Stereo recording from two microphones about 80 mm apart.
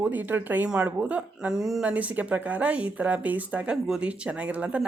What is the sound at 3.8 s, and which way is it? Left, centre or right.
Speech, centre.